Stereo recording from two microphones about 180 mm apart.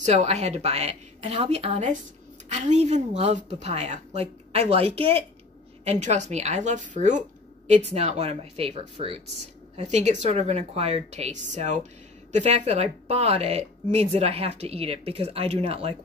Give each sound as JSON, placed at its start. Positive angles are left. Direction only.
{"t": 0.0, "sound": "a woman's voice", "side_deg": -40}